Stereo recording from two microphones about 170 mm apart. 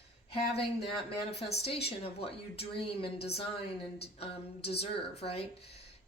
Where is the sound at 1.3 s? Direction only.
35° left (ahead or behind).